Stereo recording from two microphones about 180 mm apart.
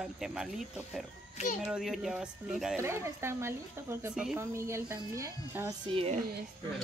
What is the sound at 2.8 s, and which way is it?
Speech, 15° right (ahead or behind).